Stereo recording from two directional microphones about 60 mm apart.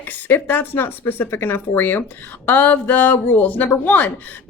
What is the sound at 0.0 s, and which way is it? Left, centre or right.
A woman's voice, left.